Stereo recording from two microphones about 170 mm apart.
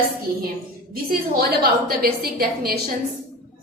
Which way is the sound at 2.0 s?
60° right (ahead or behind).